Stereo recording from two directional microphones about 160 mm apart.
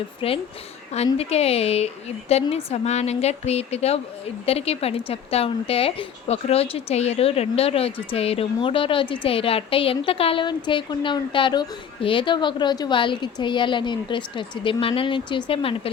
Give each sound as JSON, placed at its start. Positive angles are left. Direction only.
{"t": 0.2, "sound": "a woman's voice", "side_deg": 35}